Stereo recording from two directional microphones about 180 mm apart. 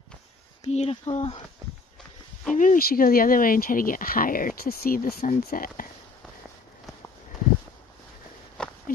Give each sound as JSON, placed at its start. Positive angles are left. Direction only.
{"t": 0.7, "sound": "speech", "side_deg": 35}
{"t": 2.5, "sound": "speech", "side_deg": 45}
{"t": 8.6, "sound": "a sound", "side_deg": 5}